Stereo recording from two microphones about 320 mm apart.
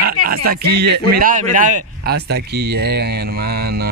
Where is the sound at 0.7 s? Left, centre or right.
Right.